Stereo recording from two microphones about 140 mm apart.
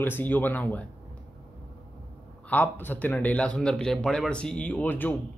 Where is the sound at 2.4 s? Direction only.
10° left (ahead or behind).